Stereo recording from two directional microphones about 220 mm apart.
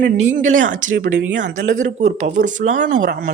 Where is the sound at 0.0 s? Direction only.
35° right (ahead or behind).